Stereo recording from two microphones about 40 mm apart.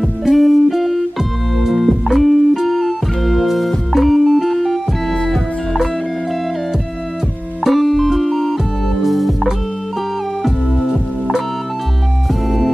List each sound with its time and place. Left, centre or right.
0.3 s music: centre
7.6 s music: centre
12.4 s music: centre